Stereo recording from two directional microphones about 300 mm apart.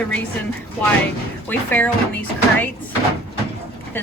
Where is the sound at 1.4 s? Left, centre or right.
Centre.